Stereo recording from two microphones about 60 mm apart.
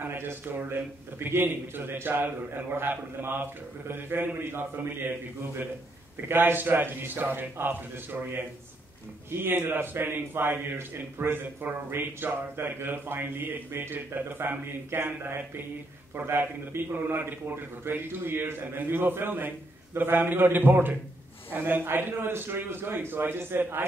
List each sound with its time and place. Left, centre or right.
0.0 s a man's voice: right
6.2 s a man's voice: right